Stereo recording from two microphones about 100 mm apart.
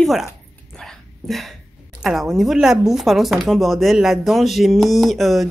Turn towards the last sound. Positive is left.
turn(degrees=0)  # may be behind; listen again after turning